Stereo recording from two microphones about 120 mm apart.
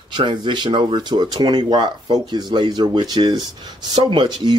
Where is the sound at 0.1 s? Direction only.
40° right (ahead or behind).